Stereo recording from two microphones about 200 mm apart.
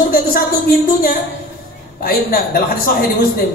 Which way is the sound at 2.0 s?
50° left (ahead or behind).